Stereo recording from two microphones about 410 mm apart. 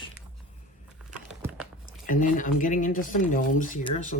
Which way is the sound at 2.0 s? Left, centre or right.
Centre.